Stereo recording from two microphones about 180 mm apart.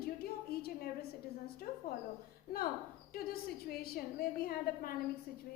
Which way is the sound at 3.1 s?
55° left (ahead or behind).